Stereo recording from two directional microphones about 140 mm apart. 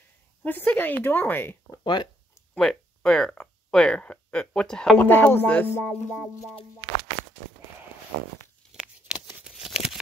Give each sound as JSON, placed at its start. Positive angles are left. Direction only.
{"t": 0.5, "sound": "speech", "side_deg": 15}
{"t": 1.8, "sound": "speech", "side_deg": 30}
{"t": 2.5, "sound": "speech", "side_deg": 5}
{"t": 5.9, "sound": "music", "side_deg": 5}
{"t": 8.7, "sound": "a sound", "side_deg": -5}